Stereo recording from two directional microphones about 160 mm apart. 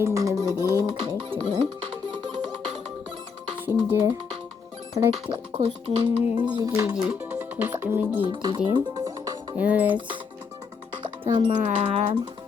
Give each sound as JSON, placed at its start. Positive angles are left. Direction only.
{"t": 0.0, "sound": "music", "side_deg": -20}
{"t": 3.7, "sound": "dishes", "side_deg": -15}
{"t": 5.2, "sound": "music", "side_deg": -35}
{"t": 6.4, "sound": "music", "side_deg": -25}
{"t": 6.9, "sound": "speech", "side_deg": -10}
{"t": 8.2, "sound": "music", "side_deg": -30}
{"t": 9.6, "sound": "dishes", "side_deg": -10}
{"t": 11.2, "sound": "music", "side_deg": -30}